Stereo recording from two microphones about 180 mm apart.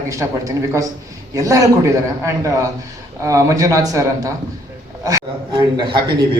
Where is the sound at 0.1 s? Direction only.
15° right (ahead or behind).